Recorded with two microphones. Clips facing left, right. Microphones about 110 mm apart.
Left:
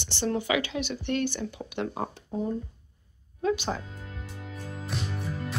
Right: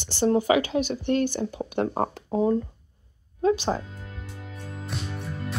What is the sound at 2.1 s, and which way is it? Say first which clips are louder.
Speech: right 8 dB; 90° right.